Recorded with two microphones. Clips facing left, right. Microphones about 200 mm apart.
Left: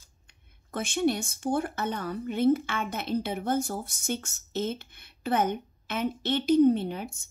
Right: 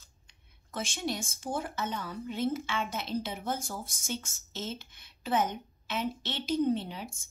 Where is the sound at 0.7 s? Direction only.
60° left (ahead or behind).